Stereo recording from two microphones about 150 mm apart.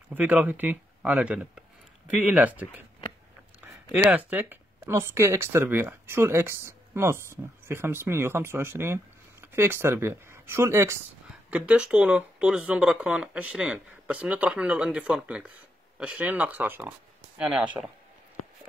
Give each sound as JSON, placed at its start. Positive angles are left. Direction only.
{"t": 0.1, "sound": "speech", "side_deg": -10}
{"t": 11.5, "sound": "speech", "side_deg": -10}